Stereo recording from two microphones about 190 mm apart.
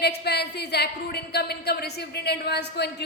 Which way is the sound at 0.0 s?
60° left (ahead or behind).